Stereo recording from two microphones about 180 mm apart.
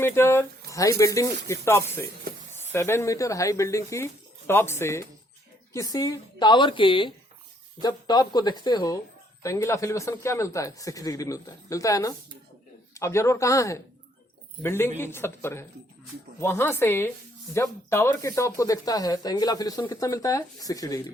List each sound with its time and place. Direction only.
0.0 s a man's voice: 10° left (ahead or behind)